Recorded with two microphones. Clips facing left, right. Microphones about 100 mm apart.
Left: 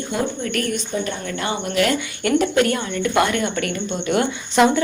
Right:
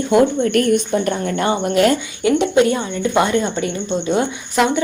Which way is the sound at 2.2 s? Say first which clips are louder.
Right 3 dB; 15° right (ahead or behind).